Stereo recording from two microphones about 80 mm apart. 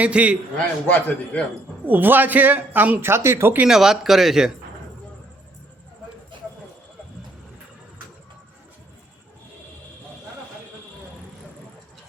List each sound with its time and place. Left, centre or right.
0.0 s a man's voice: centre
0.5 s a man's voice: centre
1.9 s a man's voice: right
3.6 s speech: centre